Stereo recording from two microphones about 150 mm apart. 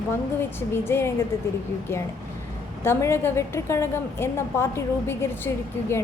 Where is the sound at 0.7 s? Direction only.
15° left (ahead or behind).